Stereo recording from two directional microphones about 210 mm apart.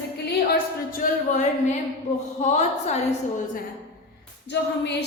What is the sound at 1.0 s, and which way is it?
Speech, 40° left (ahead or behind).